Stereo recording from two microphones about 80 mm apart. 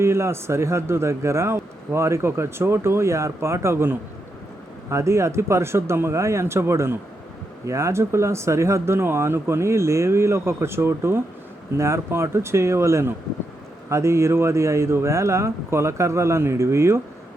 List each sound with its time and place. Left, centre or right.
0.0 s speech: right